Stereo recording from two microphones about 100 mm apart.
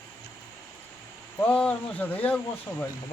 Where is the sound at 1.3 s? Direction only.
10° left (ahead or behind).